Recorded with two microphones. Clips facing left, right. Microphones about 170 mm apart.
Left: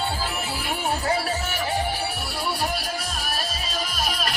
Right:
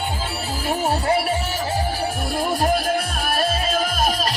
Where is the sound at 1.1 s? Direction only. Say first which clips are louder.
Right 5 dB; 25° right (ahead or behind).